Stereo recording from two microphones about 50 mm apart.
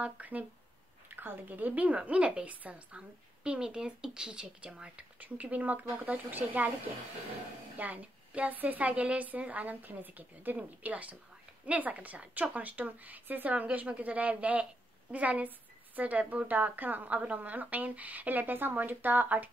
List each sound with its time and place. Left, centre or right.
0.0 s a woman's voice: right
5.2 s a woman's voice: right
7.7 s a woman's voice: right